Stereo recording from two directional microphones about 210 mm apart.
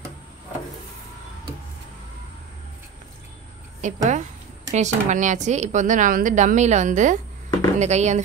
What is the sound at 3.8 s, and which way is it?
A woman's voice, 35° right (ahead or behind).